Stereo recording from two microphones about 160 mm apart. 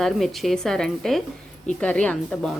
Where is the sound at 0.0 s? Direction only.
Centre (ahead or behind).